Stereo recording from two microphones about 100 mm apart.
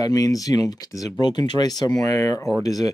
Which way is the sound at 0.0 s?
40° left (ahead or behind).